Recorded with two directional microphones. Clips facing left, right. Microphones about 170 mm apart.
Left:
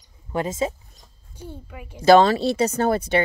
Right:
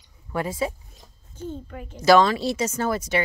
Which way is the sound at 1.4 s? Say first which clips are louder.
Right 4 dB; 10° left (ahead or behind).